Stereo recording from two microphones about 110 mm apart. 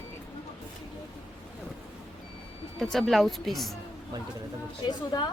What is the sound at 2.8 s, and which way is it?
Speech, centre (ahead or behind).